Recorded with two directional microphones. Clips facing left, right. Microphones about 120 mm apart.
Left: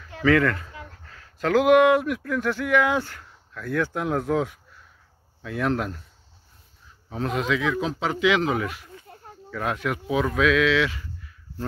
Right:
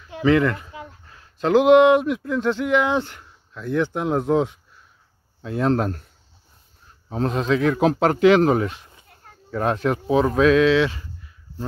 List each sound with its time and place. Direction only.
0.0 s speech: 20° right (ahead or behind)
7.1 s speech: 35° right (ahead or behind)
7.6 s speech: 45° right (ahead or behind)
8.6 s speech: 25° right (ahead or behind)